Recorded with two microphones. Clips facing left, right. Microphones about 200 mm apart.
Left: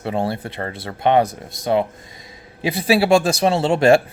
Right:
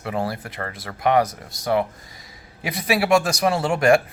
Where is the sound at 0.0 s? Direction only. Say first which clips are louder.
Left 4 dB; 25° left (ahead or behind).